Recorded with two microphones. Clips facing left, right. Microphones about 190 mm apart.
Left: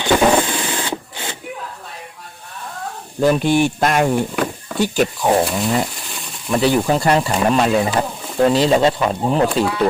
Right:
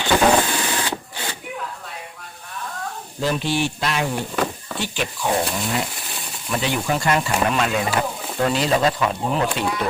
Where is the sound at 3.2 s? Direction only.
50° left (ahead or behind).